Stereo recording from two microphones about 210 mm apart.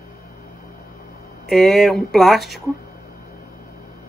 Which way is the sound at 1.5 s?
Centre (ahead or behind).